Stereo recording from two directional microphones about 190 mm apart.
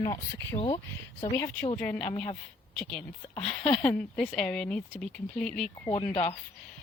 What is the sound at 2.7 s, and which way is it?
Speech, 5° left (ahead or behind).